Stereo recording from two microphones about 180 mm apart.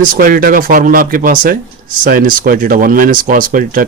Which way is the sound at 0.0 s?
50° right (ahead or behind).